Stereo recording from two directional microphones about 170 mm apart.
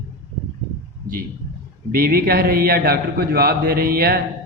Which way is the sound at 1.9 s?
60° right (ahead or behind).